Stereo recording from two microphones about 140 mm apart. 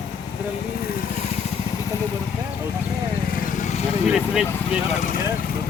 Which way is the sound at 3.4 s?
65° left (ahead or behind).